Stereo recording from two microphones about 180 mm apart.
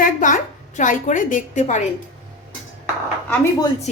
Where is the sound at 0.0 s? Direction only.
45° left (ahead or behind).